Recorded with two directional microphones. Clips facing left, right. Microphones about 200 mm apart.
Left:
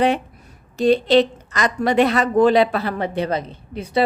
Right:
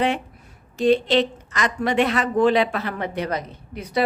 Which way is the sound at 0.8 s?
35° left (ahead or behind).